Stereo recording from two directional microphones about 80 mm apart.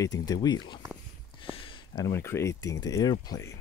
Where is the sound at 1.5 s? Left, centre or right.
Left.